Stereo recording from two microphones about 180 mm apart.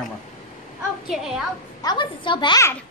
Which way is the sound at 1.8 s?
25° left (ahead or behind).